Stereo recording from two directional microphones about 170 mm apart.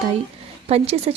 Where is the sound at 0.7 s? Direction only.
35° right (ahead or behind).